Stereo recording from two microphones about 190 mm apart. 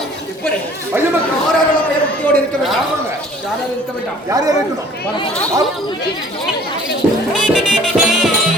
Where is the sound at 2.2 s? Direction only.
10° left (ahead or behind).